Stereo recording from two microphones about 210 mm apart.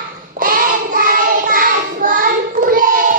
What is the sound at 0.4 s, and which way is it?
Child singing, 40° right (ahead or behind).